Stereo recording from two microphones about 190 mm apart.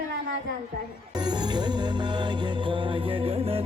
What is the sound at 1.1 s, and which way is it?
Music, 20° right (ahead or behind).